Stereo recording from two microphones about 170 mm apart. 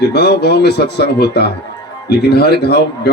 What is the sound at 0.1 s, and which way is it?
Speech, 75° left (ahead or behind).